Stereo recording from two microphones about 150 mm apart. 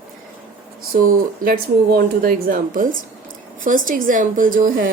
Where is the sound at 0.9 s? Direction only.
70° right (ahead or behind).